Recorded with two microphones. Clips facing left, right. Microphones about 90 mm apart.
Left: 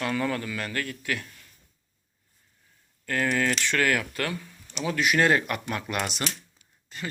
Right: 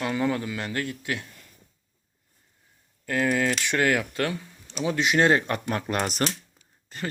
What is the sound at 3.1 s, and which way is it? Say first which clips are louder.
Speech: right 2 dB; 15° right (ahead or behind).